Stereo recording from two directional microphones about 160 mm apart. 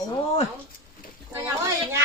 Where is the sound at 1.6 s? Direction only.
20° right (ahead or behind).